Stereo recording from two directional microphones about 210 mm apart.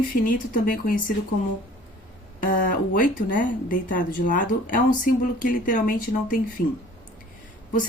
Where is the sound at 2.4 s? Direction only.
40° left (ahead or behind).